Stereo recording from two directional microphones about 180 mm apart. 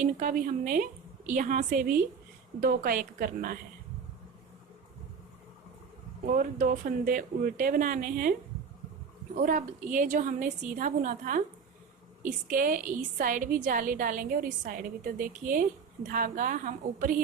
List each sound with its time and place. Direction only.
0.0 s a woman's voice: 50° right (ahead or behind)
6.2 s a woman's voice: 50° right (ahead or behind)
9.3 s a woman's voice: 50° right (ahead or behind)